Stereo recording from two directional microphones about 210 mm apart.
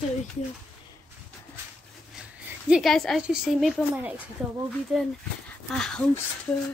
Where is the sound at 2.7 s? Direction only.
Centre (ahead or behind).